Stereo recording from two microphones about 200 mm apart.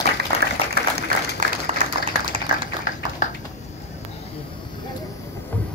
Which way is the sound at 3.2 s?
40° left (ahead or behind).